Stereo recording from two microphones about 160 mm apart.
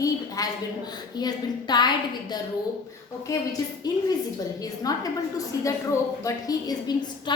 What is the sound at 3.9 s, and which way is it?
A woman's voice, 25° left (ahead or behind).